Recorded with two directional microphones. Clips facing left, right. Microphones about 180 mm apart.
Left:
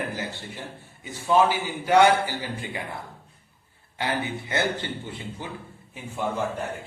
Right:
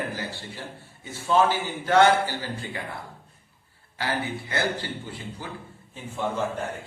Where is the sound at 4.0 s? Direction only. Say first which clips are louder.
Left 1 dB; 20° left (ahead or behind).